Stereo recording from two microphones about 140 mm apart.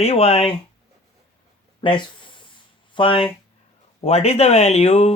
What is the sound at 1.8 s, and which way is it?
Speech, 35° left (ahead or behind).